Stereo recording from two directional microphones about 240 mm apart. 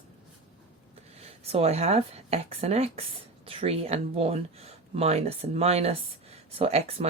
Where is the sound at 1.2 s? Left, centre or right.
Right.